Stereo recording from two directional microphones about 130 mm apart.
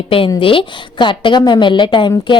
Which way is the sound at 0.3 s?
40° left (ahead or behind).